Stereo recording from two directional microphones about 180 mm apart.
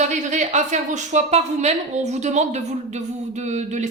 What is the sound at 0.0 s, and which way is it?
A woman's voice, 40° right (ahead or behind).